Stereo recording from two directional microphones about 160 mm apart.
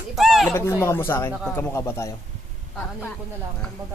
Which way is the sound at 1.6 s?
15° left (ahead or behind).